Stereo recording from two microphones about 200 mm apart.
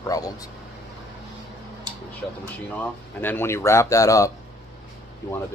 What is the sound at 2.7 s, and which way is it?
Speech, 10° left (ahead or behind).